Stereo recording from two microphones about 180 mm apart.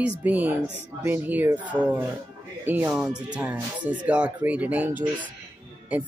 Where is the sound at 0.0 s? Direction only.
10° right (ahead or behind).